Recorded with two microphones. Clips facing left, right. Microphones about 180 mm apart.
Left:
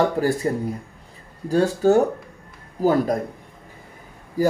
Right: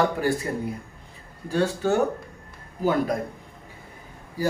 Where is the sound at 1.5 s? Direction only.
40° left (ahead or behind).